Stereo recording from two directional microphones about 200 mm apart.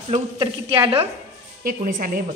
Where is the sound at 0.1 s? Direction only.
30° right (ahead or behind).